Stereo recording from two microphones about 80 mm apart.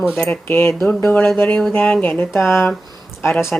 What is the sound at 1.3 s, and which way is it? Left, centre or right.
Speech, left.